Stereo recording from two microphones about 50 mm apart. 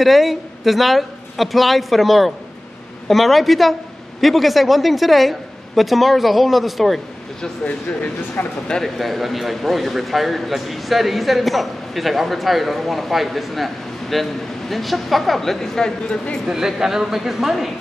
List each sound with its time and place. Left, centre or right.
0.0 s a man's voice: centre
7.6 s speech: left
8.7 s a man's voice: centre
16.4 s speech: centre